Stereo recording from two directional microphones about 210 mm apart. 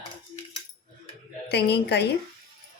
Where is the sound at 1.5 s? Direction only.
50° left (ahead or behind).